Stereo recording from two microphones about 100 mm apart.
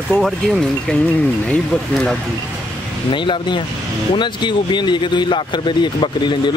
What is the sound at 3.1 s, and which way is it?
Speech, 55° left (ahead or behind).